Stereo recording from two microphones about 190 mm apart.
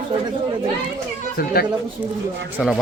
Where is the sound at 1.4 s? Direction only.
50° left (ahead or behind).